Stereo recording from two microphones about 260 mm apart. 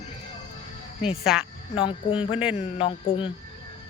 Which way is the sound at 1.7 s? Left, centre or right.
Centre.